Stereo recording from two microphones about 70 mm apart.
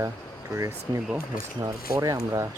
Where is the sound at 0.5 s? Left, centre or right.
Right.